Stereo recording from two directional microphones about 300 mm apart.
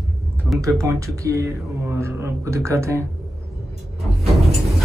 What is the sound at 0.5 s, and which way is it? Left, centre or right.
A man's voice, centre.